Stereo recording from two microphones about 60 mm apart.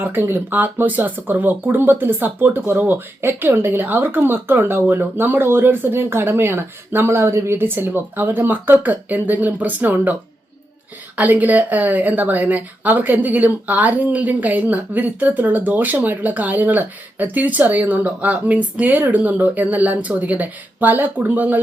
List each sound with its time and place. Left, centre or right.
0.0 s speech: right
11.2 s speech: right